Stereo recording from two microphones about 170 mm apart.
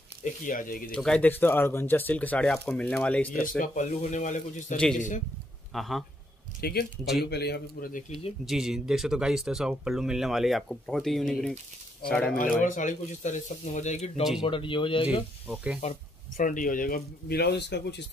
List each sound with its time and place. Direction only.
0.2 s speech: 50° left (ahead or behind)
0.9 s speech: 5° left (ahead or behind)
3.5 s speech: 50° left (ahead or behind)
5.7 s speech: centre (ahead or behind)
6.6 s a man's voice: 70° left (ahead or behind)
8.5 s speech: centre (ahead or behind)
12.6 s speech: 50° left (ahead or behind)
14.4 s speech: 30° left (ahead or behind)
15.4 s speech: 10° right (ahead or behind)
15.8 s speech: 45° left (ahead or behind); by 18.0 s 90° left